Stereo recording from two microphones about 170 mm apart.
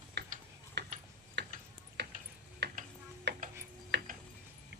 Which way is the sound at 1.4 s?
90° right.